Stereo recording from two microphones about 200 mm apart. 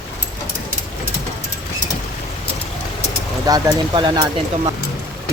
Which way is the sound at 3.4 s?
20° right (ahead or behind).